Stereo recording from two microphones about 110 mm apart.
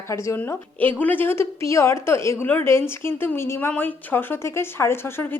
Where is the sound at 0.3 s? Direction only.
15° left (ahead or behind).